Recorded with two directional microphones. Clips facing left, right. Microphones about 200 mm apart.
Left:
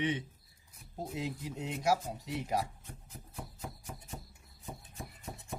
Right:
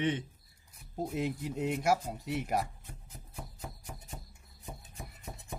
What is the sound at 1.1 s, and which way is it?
Speech, 55° right (ahead or behind).